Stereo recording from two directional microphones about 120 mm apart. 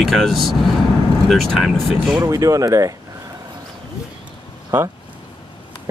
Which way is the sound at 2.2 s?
25° right (ahead or behind).